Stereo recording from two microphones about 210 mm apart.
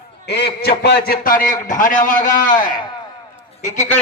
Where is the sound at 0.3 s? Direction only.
50° left (ahead or behind).